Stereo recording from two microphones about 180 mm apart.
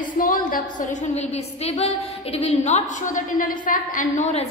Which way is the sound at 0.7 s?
45° left (ahead or behind).